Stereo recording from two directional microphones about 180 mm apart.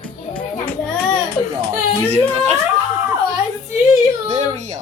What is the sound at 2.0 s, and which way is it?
Speech, 35° right (ahead or behind).